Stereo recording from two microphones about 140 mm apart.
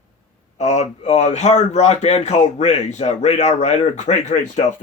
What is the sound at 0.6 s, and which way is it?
Speech, 55° left (ahead or behind).